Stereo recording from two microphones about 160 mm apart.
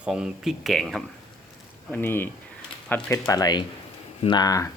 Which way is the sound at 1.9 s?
10° left (ahead or behind).